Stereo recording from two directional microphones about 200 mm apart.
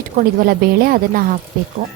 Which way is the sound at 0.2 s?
50° right (ahead or behind).